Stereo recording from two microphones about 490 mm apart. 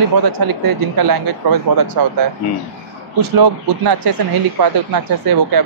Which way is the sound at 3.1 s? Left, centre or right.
Right.